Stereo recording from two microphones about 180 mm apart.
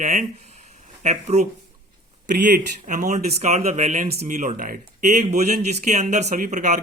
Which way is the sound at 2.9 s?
45° right (ahead or behind).